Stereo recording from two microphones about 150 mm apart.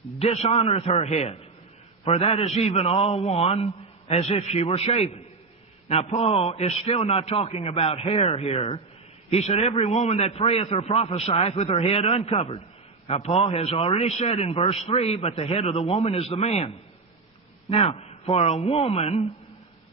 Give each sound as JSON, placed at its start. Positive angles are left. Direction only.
{"t": 0.2, "sound": "a man's voice", "side_deg": 45}